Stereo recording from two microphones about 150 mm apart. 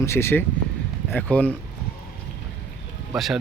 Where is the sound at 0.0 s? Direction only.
15° left (ahead or behind).